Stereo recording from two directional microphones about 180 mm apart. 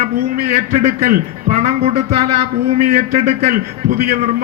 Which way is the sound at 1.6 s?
35° right (ahead or behind).